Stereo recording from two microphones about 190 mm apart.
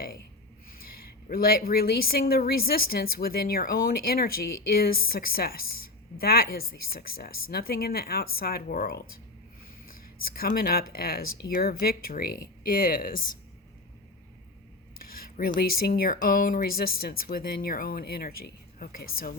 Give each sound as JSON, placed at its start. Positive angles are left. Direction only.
{"t": 0.7, "sound": "speech", "side_deg": 50}
{"t": 15.1, "sound": "speech", "side_deg": 50}